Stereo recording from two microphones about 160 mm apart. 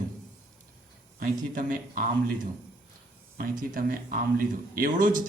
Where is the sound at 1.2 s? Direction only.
60° right (ahead or behind).